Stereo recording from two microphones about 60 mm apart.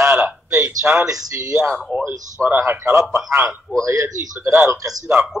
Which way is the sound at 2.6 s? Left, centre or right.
Right.